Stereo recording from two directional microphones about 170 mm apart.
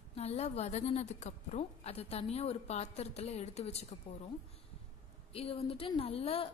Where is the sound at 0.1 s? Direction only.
40° left (ahead or behind).